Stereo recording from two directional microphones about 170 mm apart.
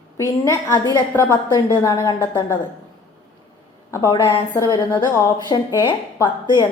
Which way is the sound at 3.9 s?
20° left (ahead or behind).